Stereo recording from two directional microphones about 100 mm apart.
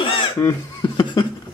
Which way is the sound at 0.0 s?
55° left (ahead or behind).